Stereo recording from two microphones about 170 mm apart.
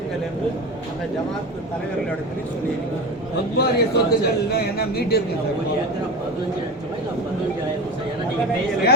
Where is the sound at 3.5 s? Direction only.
70° left (ahead or behind).